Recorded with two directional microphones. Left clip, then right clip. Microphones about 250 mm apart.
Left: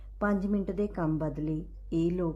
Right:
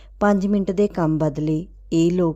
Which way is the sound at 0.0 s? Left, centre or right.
Right.